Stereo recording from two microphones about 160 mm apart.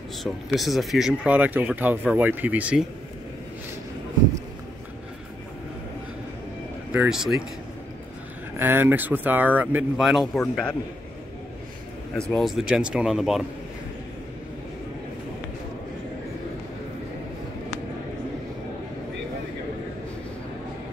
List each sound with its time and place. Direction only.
0.2 s speech: centre (ahead or behind)
6.9 s speech: 5° right (ahead or behind)
8.5 s speech: 15° right (ahead or behind)
10.2 s a man's voice: 10° left (ahead or behind)
12.2 s speech: 5° left (ahead or behind)